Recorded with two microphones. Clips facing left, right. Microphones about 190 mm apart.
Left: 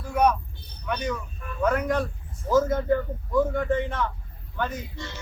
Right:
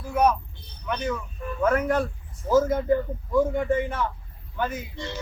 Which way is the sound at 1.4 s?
25° right (ahead or behind).